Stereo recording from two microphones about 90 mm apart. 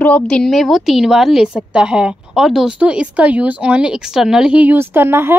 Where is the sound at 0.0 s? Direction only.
15° left (ahead or behind).